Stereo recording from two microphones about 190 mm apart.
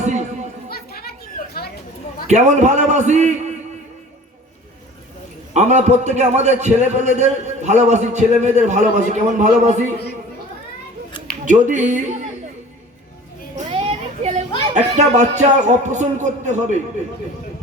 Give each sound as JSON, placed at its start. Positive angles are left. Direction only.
{"t": 0.7, "sound": "chatter", "side_deg": 55}
{"t": 2.2, "sound": "a man's voice", "side_deg": -35}
{"t": 5.5, "sound": "a man's voice", "side_deg": -35}
{"t": 11.4, "sound": "a man's voice", "side_deg": -40}
{"t": 13.7, "sound": "children playing", "side_deg": -30}
{"t": 14.7, "sound": "a man's voice", "side_deg": -35}